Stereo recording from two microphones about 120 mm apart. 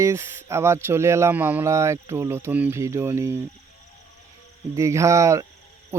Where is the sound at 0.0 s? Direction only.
25° right (ahead or behind).